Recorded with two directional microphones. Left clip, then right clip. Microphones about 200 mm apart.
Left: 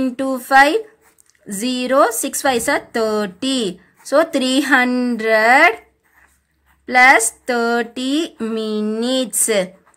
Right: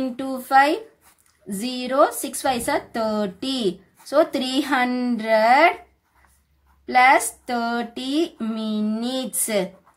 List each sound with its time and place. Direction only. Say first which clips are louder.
0.0 s speech: left 7 dB; 30° left (ahead or behind)
6.9 s speech: left 5 dB; 25° left (ahead or behind)